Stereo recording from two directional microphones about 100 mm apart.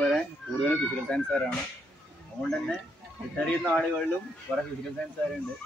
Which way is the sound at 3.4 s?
10° left (ahead or behind).